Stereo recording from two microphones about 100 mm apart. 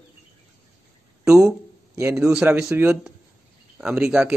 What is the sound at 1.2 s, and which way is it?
Speech, 30° right (ahead or behind).